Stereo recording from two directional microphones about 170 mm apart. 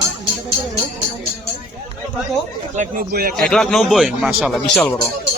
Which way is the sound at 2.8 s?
60° right (ahead or behind).